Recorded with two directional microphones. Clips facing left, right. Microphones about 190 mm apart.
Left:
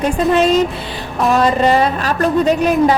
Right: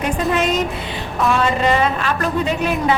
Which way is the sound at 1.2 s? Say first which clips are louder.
Left 4 dB; 40° left (ahead or behind).